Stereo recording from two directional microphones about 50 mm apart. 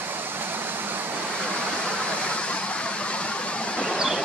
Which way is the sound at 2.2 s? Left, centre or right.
Left.